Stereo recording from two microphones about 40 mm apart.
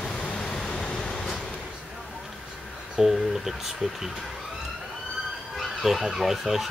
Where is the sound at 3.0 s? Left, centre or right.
Centre.